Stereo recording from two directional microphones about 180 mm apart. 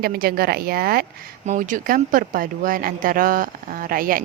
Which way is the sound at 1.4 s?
45° right (ahead or behind).